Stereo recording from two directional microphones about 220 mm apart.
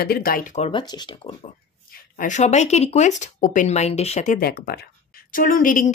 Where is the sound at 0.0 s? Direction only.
45° left (ahead or behind).